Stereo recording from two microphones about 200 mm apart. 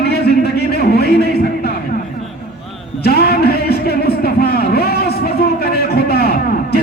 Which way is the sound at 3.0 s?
50° left (ahead or behind).